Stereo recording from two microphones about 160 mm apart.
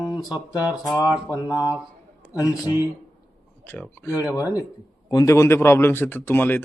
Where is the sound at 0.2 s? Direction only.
5° right (ahead or behind).